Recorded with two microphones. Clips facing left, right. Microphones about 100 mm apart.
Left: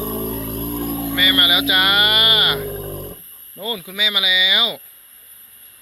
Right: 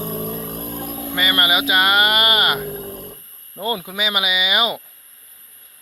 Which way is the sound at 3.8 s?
45° right (ahead or behind).